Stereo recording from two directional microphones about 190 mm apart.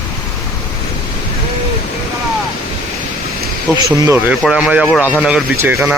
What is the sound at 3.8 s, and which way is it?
Speech, 20° right (ahead or behind).